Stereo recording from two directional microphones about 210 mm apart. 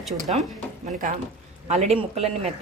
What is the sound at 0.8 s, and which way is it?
Speech, 40° right (ahead or behind).